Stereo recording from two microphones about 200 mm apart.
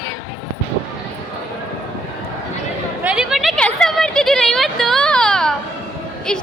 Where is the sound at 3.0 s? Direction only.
5° right (ahead or behind).